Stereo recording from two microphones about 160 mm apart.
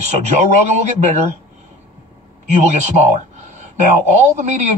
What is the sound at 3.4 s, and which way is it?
Speech, 45° right (ahead or behind).